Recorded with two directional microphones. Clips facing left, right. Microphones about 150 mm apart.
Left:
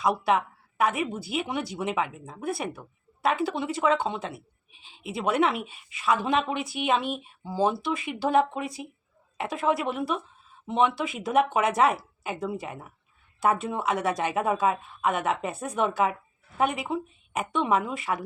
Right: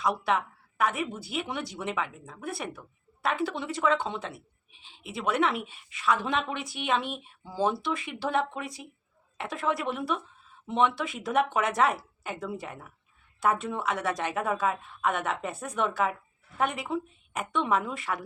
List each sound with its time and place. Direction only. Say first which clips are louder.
0.0 s a woman's voice: left 3 dB; 10° left (ahead or behind)
2.2 s speech: left 4 dB; 25° left (ahead or behind)
2.5 s a woman's voice: left 5 dB; 10° left (ahead or behind)